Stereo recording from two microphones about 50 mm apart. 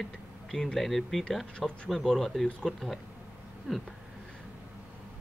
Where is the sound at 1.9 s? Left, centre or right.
Centre.